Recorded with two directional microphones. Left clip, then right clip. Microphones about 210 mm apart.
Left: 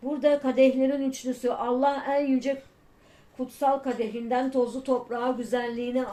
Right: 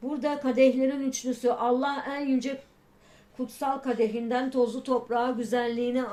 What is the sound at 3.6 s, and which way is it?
Speech, 35° right (ahead or behind).